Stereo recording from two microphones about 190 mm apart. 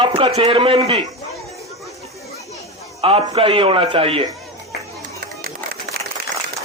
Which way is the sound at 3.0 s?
30° right (ahead or behind).